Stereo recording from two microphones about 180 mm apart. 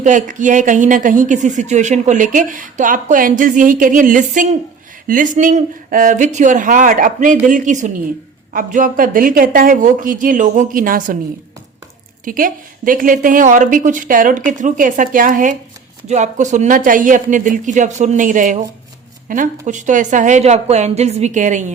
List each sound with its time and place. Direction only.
0.0 s speech: 45° right (ahead or behind)
12.2 s speech: 50° right (ahead or behind)